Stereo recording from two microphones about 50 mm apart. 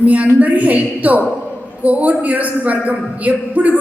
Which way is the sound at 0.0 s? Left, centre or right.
Right.